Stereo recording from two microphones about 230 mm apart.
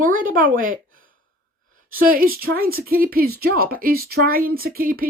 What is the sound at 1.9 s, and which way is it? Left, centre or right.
Speech, right.